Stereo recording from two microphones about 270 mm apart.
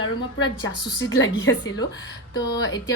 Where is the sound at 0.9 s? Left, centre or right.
Left.